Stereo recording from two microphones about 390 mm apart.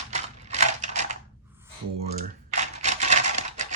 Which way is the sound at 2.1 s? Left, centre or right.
Centre.